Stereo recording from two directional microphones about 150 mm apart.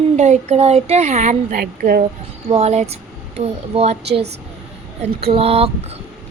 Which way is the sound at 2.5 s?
45° right (ahead or behind).